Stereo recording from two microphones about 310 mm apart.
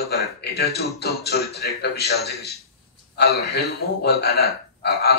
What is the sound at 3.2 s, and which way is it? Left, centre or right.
A man's voice, left.